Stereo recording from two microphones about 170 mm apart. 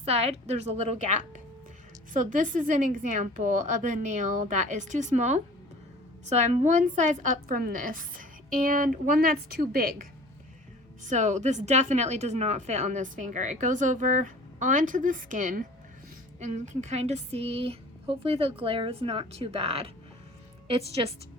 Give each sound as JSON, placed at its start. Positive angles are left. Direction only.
{"t": 0.0, "sound": "a woman's voice", "side_deg": -40}
{"t": 11.0, "sound": "a woman's voice", "side_deg": -45}